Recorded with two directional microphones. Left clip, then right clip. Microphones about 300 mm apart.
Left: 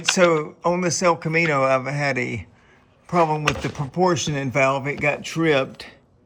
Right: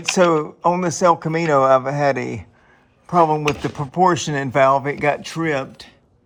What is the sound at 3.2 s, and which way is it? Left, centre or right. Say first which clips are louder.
Speech: right 4 dB; right.